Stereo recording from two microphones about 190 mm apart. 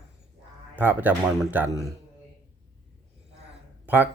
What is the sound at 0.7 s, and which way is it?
Speech, 10° right (ahead or behind).